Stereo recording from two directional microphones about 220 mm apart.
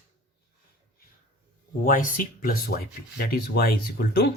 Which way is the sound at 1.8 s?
40° left (ahead or behind).